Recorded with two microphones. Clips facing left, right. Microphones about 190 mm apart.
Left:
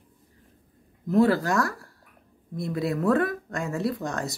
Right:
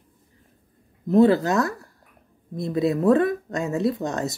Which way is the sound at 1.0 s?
20° right (ahead or behind).